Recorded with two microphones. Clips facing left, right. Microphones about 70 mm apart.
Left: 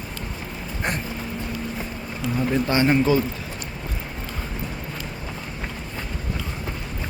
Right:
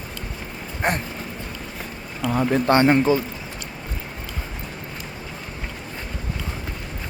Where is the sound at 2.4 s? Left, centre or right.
Right.